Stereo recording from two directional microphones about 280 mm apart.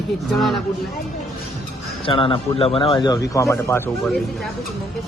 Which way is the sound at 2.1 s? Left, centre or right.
Centre.